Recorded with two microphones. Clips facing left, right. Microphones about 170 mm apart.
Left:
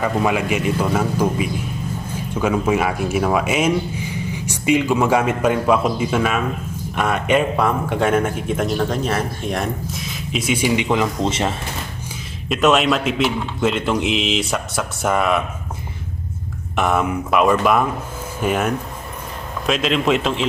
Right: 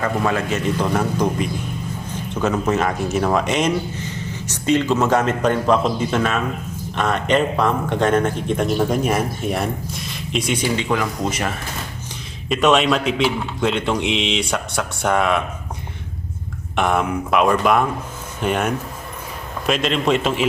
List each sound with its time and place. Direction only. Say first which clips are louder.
0.0 s speech: left 1 dB; 15° left (ahead or behind)
8.9 s a man's voice: right 2 dB; 10° right (ahead or behind); by 10.8 s 10° left (ahead or behind)
10.8 s speech: left 2 dB; 20° left (ahead or behind)
12.5 s a man's voice: even; centre (ahead or behind)
16.7 s a man's voice: even; 5° left (ahead or behind)